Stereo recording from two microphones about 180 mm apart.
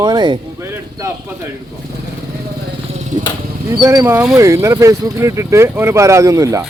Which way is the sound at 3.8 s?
20° right (ahead or behind).